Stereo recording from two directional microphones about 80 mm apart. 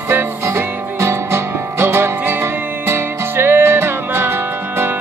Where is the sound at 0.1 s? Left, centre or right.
Right.